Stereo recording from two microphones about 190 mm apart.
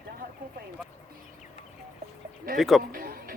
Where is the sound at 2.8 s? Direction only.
50° right (ahead or behind).